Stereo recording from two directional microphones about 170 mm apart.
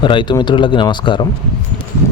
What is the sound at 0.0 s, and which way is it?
Speech, 30° left (ahead or behind).